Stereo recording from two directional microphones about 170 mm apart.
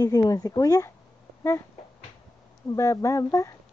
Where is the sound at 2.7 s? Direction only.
20° left (ahead or behind).